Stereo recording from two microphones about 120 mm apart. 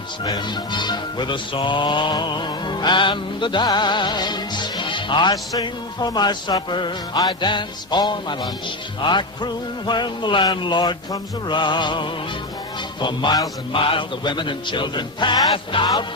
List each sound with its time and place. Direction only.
0.3 s music: 35° left (ahead or behind)
13.7 s music: 45° left (ahead or behind)